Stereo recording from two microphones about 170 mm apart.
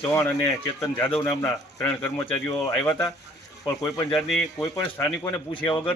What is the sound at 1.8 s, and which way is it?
Speech, 10° left (ahead or behind).